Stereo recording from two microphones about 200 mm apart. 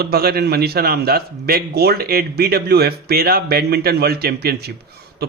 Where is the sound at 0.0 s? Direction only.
50° right (ahead or behind).